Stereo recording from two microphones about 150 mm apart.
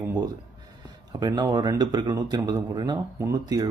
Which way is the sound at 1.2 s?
30° right (ahead or behind).